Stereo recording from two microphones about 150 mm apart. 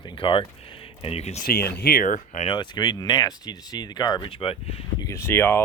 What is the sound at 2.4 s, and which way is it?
Speech, 30° left (ahead or behind).